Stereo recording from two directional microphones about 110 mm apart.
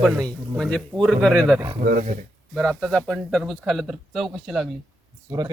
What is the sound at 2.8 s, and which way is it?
Speech, 5° left (ahead or behind).